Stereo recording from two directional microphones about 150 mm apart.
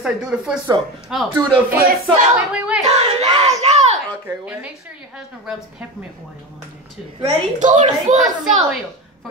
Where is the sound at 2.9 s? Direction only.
45° right (ahead or behind).